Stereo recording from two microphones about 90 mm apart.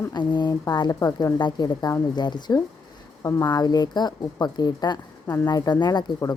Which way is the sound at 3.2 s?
35° left (ahead or behind).